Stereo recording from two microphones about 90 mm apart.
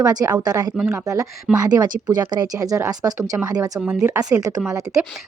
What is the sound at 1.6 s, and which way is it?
A woman's voice, 45° right (ahead or behind).